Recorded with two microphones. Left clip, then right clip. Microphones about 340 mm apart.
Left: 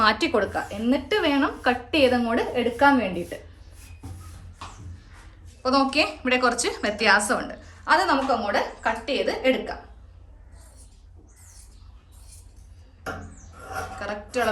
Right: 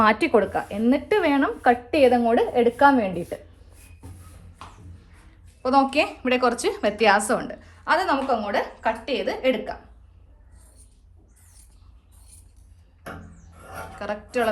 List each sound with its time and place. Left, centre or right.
0.0 s speech: centre
5.6 s a woman's voice: right
14.0 s a woman's voice: right